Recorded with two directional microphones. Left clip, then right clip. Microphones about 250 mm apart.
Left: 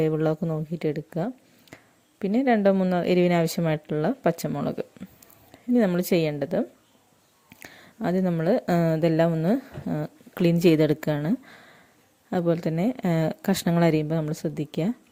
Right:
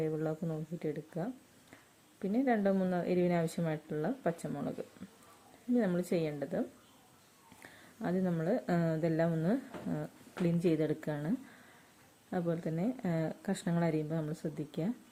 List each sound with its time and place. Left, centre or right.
0.0 s speech: left